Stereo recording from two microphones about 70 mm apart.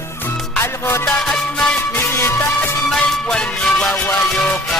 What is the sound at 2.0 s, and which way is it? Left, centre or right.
Music, left.